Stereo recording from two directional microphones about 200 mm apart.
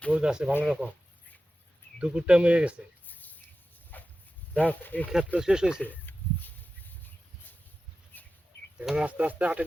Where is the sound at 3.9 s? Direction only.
10° left (ahead or behind).